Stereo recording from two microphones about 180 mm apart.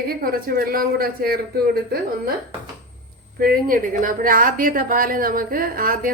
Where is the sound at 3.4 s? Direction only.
55° right (ahead or behind).